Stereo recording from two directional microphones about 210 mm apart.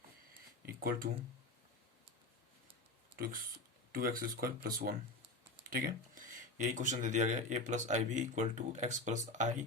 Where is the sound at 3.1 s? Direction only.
45° right (ahead or behind).